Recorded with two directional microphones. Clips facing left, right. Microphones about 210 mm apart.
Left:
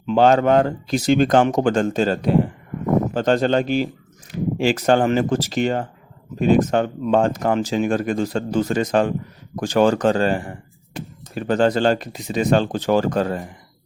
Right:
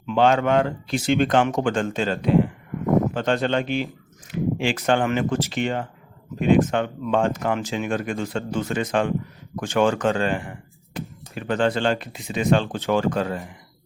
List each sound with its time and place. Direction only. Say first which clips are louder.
0.0 s speech: left 4 dB; 35° left (ahead or behind)